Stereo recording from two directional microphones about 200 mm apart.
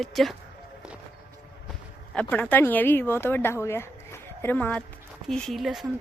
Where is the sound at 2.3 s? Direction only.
10° left (ahead or behind).